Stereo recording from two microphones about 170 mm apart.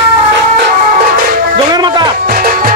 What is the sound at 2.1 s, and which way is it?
Music, 60° right (ahead or behind).